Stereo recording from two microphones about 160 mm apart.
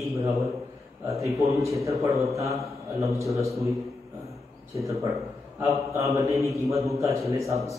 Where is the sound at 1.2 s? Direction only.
20° right (ahead or behind).